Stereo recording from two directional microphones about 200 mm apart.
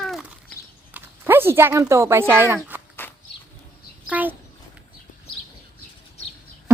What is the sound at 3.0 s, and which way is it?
Walk, 10° left (ahead or behind).